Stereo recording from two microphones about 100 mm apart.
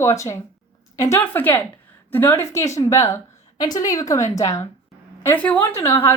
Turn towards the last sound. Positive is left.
turn(degrees=30)  # may be behind; listen again after turning